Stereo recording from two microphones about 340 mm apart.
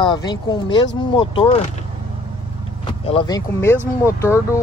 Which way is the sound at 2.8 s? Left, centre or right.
Centre.